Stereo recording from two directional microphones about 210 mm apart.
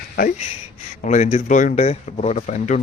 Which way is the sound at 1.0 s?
35° left (ahead or behind).